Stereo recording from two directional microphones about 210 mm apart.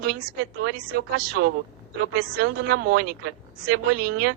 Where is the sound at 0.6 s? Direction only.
50° right (ahead or behind).